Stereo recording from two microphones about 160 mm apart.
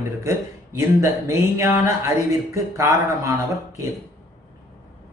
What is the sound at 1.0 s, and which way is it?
Speech, 20° right (ahead or behind).